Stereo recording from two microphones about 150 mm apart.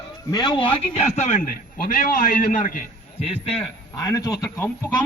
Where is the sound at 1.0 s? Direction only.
50° left (ahead or behind).